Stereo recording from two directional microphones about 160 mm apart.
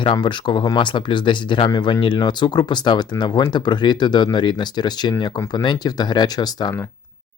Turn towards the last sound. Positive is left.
turn(degrees=25)  # may be behind; listen again after turning